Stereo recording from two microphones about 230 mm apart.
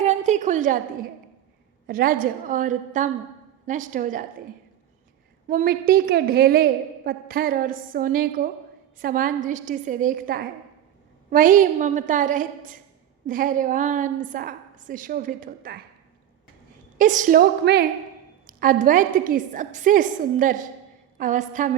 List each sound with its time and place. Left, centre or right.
0.0 s a sound: right
1.9 s a woman's voice: right
5.5 s a woman's voice: right
17.0 s a woman's voice: right